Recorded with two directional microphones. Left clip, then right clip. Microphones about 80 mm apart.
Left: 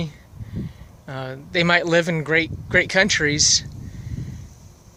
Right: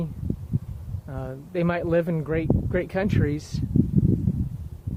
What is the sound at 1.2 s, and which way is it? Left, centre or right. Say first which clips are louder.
Speech: left 6 dB; left.